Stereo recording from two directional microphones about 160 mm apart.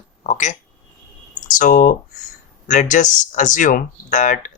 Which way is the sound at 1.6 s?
55° left (ahead or behind).